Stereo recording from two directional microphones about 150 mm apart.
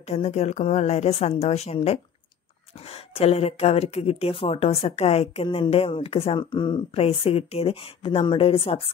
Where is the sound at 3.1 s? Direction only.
45° left (ahead or behind).